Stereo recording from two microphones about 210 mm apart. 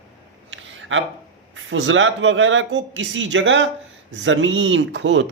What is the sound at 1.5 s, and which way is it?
Speech, 65° right (ahead or behind).